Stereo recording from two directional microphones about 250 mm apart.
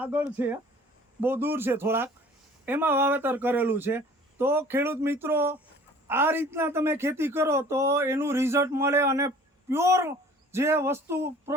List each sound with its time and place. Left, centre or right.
0.0 s a man's voice: centre